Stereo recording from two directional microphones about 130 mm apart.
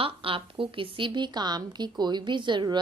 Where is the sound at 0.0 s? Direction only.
45° right (ahead or behind).